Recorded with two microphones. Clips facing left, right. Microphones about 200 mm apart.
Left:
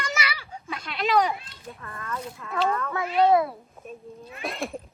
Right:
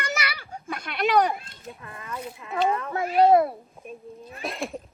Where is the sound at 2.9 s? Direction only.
45° right (ahead or behind).